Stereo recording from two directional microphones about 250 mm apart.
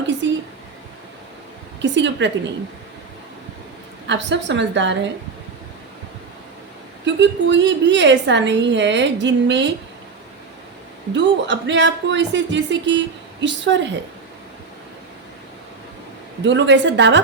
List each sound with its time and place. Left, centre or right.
0.2 s a sound: right
1.8 s a woman's voice: right
4.0 s a woman's voice: right
7.0 s a woman's voice: right
11.1 s a woman's voice: right
16.4 s a woman's voice: right